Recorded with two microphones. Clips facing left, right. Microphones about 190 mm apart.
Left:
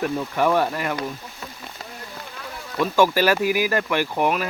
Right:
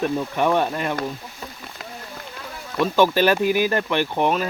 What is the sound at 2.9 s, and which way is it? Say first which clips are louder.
Speech: right 1 dB; 20° right (ahead or behind).